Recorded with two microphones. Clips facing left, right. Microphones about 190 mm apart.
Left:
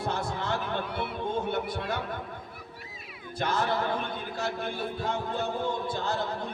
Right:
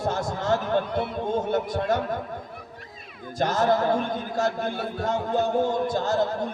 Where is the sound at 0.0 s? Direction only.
45° right (ahead or behind).